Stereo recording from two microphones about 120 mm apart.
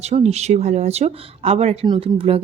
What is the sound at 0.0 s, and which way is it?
Speech, 65° right (ahead or behind).